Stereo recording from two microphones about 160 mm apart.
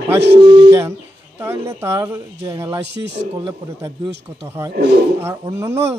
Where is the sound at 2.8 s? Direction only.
90° right.